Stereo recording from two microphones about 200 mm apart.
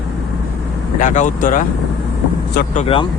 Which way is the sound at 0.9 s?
40° left (ahead or behind).